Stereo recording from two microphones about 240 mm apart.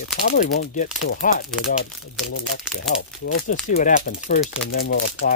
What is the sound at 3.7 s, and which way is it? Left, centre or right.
Speech, left.